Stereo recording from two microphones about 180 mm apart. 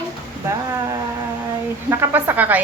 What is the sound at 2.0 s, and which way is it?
Speech, 10° right (ahead or behind).